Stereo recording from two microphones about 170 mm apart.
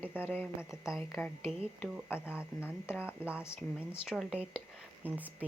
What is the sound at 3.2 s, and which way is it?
A woman's voice, 5° right (ahead or behind).